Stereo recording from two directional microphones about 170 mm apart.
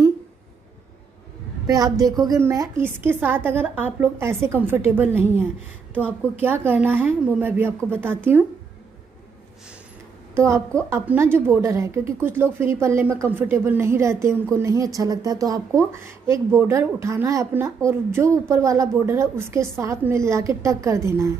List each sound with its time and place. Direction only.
1.7 s a woman's voice: 20° right (ahead or behind)
10.3 s a woman's voice: 15° right (ahead or behind)